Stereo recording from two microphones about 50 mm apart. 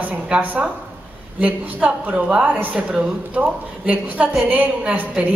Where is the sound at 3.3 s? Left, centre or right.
Right.